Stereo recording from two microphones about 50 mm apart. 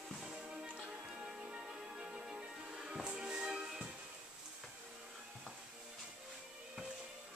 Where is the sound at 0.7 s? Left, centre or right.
Centre.